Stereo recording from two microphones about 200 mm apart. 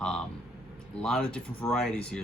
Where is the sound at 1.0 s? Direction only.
5° left (ahead or behind).